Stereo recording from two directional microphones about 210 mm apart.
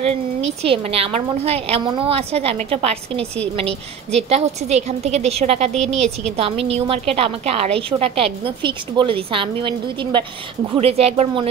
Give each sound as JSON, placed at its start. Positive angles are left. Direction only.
{"t": 0.0, "sound": "a woman's voice", "side_deg": -30}